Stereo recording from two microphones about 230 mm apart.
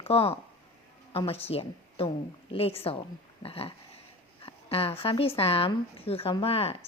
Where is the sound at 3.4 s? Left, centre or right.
Left.